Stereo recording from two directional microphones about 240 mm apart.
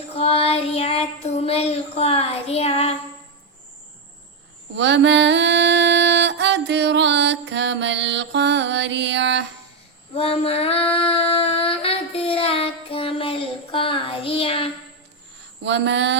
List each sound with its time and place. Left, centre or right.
0.2 s child singing: left
4.8 s mantra: right
10.2 s female singing: left
10.9 s child singing: left
15.6 s a sound: right